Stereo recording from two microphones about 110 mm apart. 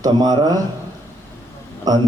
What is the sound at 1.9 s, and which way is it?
Speech, 35° right (ahead or behind).